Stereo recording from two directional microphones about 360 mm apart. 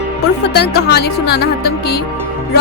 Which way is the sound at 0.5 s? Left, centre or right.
Left.